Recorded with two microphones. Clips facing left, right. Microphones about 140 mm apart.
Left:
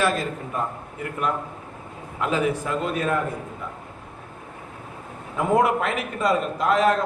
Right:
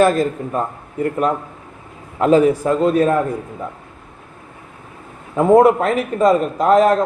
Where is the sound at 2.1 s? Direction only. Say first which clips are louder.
Right 11 dB; 40° right (ahead or behind).